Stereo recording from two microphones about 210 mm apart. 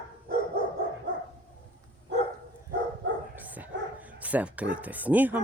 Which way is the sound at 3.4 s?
10° right (ahead or behind).